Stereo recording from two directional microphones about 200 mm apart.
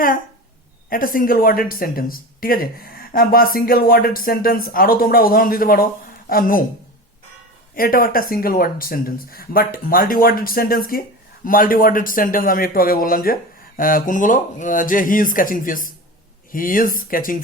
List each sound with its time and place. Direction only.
0.9 s speech: 45° left (ahead or behind)
7.8 s speech: 45° left (ahead or behind)